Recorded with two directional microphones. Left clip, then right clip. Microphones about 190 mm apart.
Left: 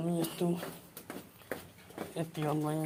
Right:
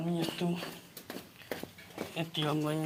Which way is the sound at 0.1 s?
20° left (ahead or behind).